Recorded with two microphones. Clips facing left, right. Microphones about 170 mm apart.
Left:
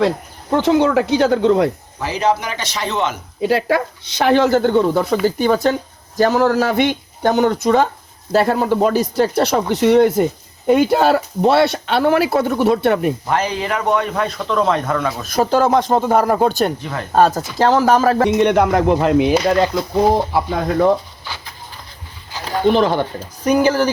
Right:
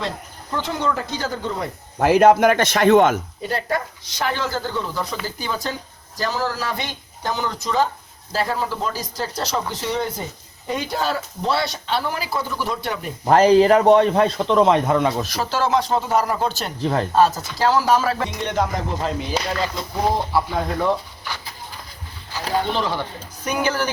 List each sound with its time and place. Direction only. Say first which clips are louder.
0.5 s speech: left 10 dB; 75° left (ahead or behind)
2.0 s speech: right 6 dB; 55° right (ahead or behind)
3.4 s speech: left 10 dB; 75° left (ahead or behind)
13.2 s speech: right 7 dB; 40° right (ahead or behind); by 15.2 s 25° right (ahead or behind)
15.3 s speech: left 6 dB; 50° left (ahead or behind)
16.8 s speech: right 5 dB; 30° right (ahead or behind)
17.2 s speech: left 6 dB; 45° left (ahead or behind)
18.3 s speech: left 10 dB; 65° left (ahead or behind)
22.7 s speech: left 8 dB; 55° left (ahead or behind)
23.4 s speech: left 8 dB; 35° left (ahead or behind)